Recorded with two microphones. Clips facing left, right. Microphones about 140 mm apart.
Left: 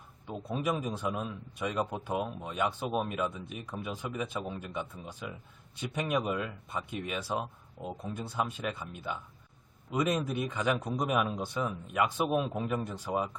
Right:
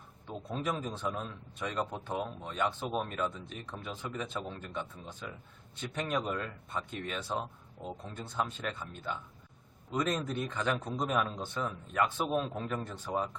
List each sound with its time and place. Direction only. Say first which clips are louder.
0.3 s a man's voice: left 3 dB; 10° left (ahead or behind)